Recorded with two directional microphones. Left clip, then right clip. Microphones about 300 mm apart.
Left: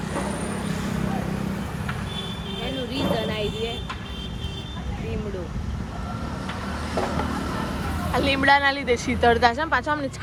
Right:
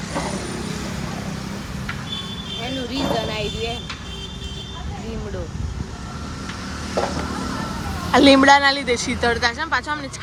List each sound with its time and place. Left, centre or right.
2.9 s speech: right
8.1 s a woman's voice: right
8.4 s speech: centre